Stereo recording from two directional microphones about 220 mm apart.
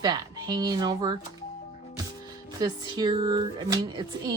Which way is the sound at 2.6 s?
20° right (ahead or behind).